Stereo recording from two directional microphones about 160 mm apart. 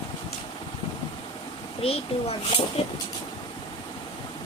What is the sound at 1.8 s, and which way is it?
Speech, 35° left (ahead or behind).